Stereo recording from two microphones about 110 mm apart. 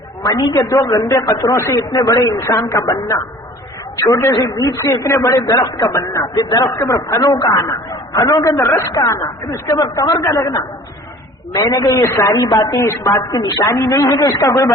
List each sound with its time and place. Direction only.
0.3 s a woman's voice: 30° left (ahead or behind)
11.6 s a woman's voice: 30° left (ahead or behind)
12.3 s a woman's voice: 35° left (ahead or behind)